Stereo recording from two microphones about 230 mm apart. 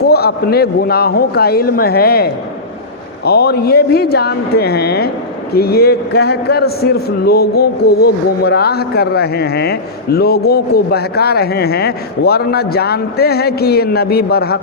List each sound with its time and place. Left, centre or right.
0.1 s a man's voice: left